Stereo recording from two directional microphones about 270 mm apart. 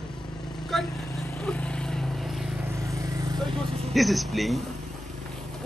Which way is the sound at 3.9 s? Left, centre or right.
Centre.